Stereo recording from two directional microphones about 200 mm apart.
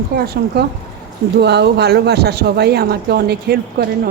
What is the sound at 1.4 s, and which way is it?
Speech, 55° right (ahead or behind).